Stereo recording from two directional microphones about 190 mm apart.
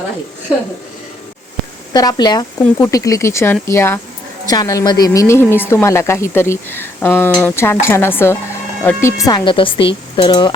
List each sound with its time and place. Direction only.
1.9 s speech: 20° left (ahead or behind)
5.5 s speech: 10° right (ahead or behind)
5.7 s speech: 15° left (ahead or behind)